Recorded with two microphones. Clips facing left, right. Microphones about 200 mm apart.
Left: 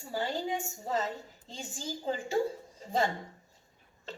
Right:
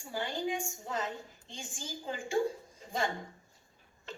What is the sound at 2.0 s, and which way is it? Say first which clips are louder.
Speech: left 2 dB; 35° left (ahead or behind).